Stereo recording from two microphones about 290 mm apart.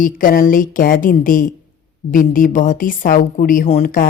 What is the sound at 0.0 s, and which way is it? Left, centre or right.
Speech, left.